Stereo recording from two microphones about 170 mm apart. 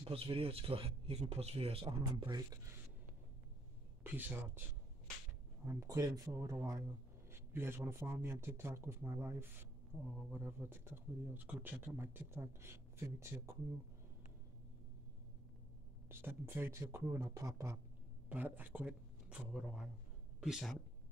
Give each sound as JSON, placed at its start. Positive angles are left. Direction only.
{"t": 0.0, "sound": "speech", "side_deg": -35}
{"t": 4.0, "sound": "speech", "side_deg": -10}
{"t": 5.7, "sound": "speech", "side_deg": -20}
{"t": 16.1, "sound": "speech", "side_deg": -15}